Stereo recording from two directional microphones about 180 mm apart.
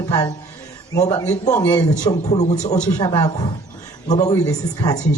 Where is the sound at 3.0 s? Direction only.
25° left (ahead or behind).